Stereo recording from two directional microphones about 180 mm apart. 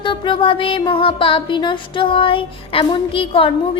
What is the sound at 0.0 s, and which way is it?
Music, 25° left (ahead or behind).